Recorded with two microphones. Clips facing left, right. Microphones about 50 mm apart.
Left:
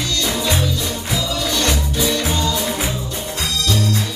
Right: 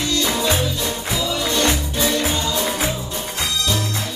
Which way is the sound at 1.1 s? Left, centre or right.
Right.